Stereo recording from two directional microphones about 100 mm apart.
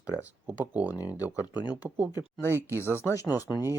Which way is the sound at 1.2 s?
35° left (ahead or behind).